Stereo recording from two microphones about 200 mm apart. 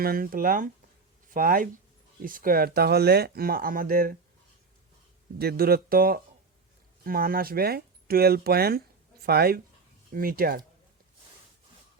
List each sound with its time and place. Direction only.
0.0 s speech: 45° right (ahead or behind)
5.4 s speech: 50° right (ahead or behind)